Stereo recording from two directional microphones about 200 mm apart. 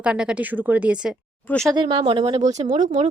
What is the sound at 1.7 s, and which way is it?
A woman's voice, 25° right (ahead or behind).